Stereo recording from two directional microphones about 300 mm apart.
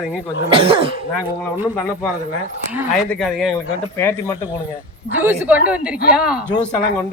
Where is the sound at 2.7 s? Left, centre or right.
Centre.